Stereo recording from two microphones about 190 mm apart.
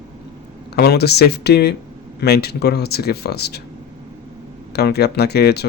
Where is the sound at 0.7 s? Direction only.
60° left (ahead or behind).